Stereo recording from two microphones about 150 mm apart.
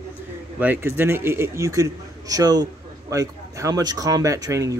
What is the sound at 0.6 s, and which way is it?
A man's voice, 15° right (ahead or behind).